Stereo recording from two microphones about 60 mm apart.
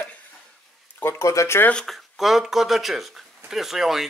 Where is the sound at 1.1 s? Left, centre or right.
Left.